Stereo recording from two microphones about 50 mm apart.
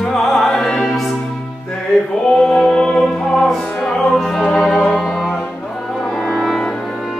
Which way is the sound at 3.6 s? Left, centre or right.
Left.